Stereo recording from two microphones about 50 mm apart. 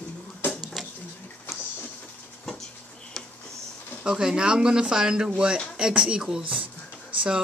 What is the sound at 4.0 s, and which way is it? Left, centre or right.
Speech, centre.